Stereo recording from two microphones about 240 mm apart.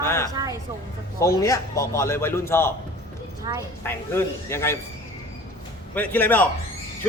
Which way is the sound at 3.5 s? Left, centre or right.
Centre.